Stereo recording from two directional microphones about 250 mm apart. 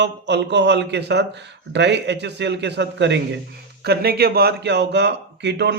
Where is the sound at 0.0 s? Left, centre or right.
Right.